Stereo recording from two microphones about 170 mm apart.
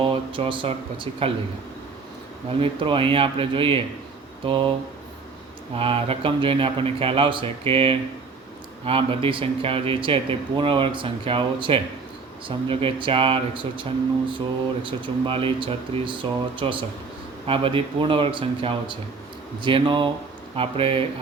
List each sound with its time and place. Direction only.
0.0 s speech: 30° right (ahead or behind)
2.6 s speech: 30° right (ahead or behind)
5.7 s speech: 35° right (ahead or behind)
14.8 s speech: 30° right (ahead or behind)